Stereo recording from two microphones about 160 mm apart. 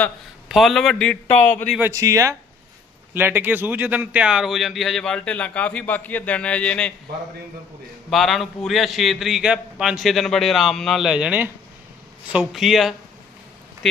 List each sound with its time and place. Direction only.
0.4 s speech: centre (ahead or behind)
1.8 s speech: 20° right (ahead or behind); by 6.9 s 5° left (ahead or behind)
8.1 s speech: centre (ahead or behind)